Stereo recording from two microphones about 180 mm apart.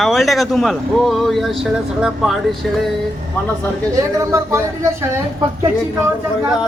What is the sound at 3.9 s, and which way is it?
Speech, 15° right (ahead or behind).